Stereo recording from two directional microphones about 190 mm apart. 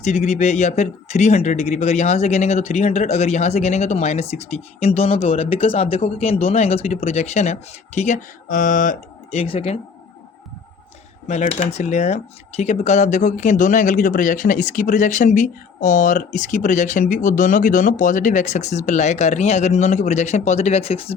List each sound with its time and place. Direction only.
0.0 s speech: 35° left (ahead or behind)
11.3 s speech: 35° left (ahead or behind)